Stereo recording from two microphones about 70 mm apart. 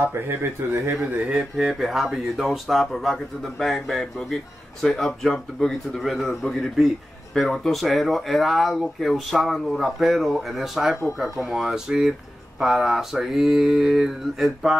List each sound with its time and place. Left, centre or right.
0.0 s speech: right
1.2 s speech: centre
12.5 s a sound: centre